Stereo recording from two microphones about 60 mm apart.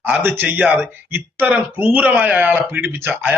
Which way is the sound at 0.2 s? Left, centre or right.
Right.